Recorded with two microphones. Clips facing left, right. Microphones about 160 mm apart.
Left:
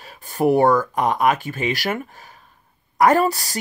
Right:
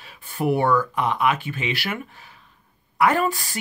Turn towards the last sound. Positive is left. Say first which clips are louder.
# left 4 dB
turn(degrees=40)  # may be behind; listen again after turning